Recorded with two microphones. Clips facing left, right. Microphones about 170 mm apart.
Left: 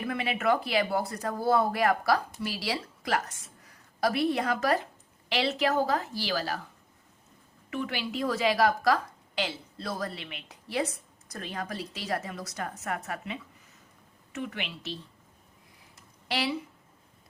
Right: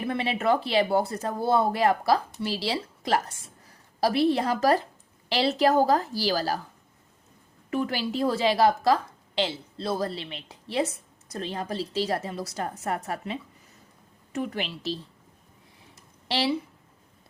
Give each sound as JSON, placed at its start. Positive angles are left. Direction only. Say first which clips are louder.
{"t": 0.0, "sound": "a woman's voice", "louder": "right 3 dB", "side_deg": -30}
{"t": 7.7, "sound": "a woman's voice", "louder": "right 5 dB", "side_deg": -40}
{"t": 16.3, "sound": "a woman's voice", "louder": "right 4 dB", "side_deg": -30}